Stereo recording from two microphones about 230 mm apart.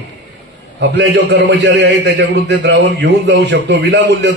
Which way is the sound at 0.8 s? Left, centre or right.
Right.